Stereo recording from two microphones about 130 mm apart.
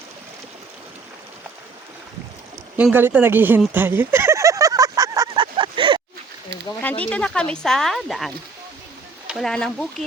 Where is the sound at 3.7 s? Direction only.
15° right (ahead or behind).